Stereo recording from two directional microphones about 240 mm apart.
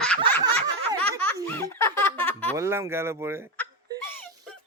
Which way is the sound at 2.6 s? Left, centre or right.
Centre.